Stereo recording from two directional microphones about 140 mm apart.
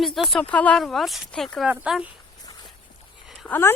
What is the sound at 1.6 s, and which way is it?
Speech, 10° right (ahead or behind).